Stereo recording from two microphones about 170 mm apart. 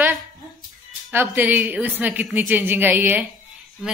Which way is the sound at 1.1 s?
10° right (ahead or behind).